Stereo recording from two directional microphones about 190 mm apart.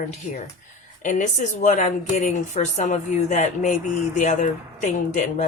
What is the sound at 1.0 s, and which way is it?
A woman's voice, 40° left (ahead or behind).